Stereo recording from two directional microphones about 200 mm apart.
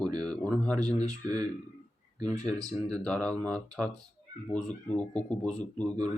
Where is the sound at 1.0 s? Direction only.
20° right (ahead or behind).